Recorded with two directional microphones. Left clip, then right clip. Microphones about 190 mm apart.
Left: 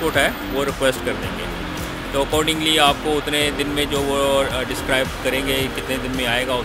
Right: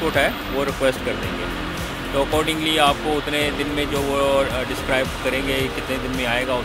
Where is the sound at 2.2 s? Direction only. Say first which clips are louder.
Left 1 dB; 10° left (ahead or behind).